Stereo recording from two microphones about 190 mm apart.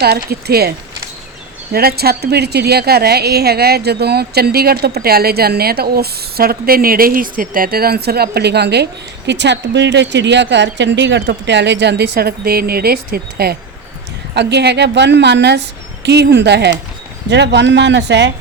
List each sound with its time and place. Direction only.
0.0 s a woman's voice: 55° right (ahead or behind)
1.7 s a woman's voice: 55° right (ahead or behind)